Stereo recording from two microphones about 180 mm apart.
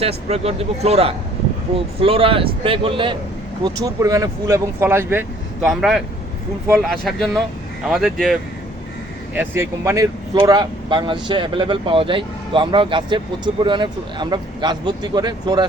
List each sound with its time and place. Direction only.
0.0 s speech: 35° right (ahead or behind); by 5.2 s 15° right (ahead or behind)
5.6 s speech: centre (ahead or behind)
7.0 s speech: centre (ahead or behind)
9.3 s speech: 10° right (ahead or behind)